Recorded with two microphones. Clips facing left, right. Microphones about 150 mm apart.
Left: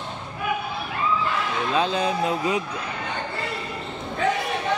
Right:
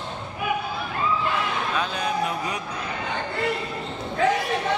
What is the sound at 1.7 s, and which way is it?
Speech, 30° left (ahead or behind).